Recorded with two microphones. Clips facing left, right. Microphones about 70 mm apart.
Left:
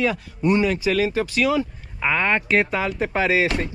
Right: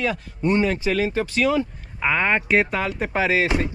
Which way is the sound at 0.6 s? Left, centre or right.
Right.